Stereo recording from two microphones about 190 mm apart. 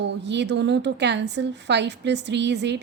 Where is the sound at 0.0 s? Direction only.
65° right (ahead or behind).